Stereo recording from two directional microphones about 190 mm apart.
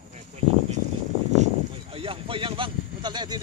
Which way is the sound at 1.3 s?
35° right (ahead or behind).